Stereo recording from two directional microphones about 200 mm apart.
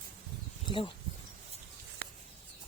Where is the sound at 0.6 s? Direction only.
25° left (ahead or behind).